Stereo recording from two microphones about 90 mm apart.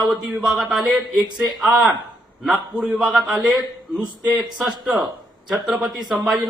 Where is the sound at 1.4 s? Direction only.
5° right (ahead or behind).